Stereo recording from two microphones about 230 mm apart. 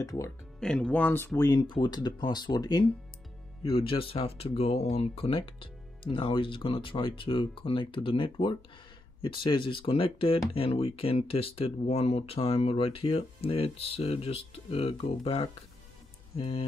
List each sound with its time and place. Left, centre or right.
0.2 s speech: centre; by 16.6 s left